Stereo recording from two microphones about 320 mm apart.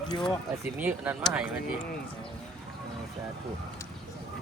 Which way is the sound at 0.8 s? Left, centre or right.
Centre.